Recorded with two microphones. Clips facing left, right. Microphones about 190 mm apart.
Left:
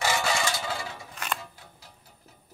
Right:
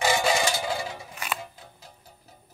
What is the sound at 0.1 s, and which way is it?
Music, 15° right (ahead or behind).